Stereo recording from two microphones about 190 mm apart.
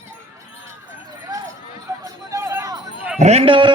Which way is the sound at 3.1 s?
35° right (ahead or behind).